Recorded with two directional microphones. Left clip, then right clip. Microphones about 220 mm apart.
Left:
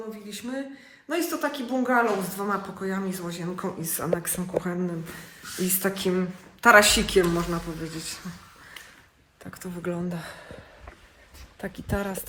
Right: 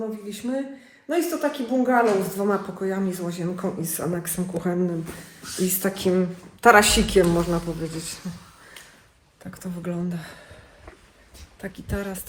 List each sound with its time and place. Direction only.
0.3 s a woman's voice: centre (ahead or behind)
9.4 s speech: 20° left (ahead or behind)
10.2 s speech: 30° left (ahead or behind)
11.6 s speech: 30° left (ahead or behind)